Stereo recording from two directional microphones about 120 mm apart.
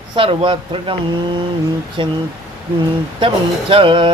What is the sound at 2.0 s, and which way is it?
Mantra, 45° right (ahead or behind).